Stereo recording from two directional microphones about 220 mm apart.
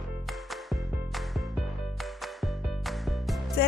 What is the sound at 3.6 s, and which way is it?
Music, 45° left (ahead or behind).